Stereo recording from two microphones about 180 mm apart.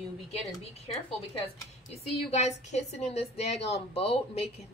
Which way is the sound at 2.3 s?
40° left (ahead or behind).